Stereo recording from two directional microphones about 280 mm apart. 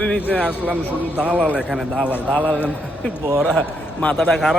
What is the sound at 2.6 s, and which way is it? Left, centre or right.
Speech, centre.